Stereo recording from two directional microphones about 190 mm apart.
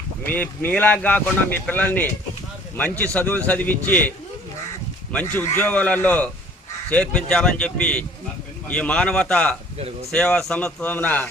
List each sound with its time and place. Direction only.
0.3 s a man's voice: 10° left (ahead or behind)
5.1 s a man's voice: 10° left (ahead or behind)
9.7 s speech: 30° right (ahead or behind)
10.1 s speech: 5° left (ahead or behind)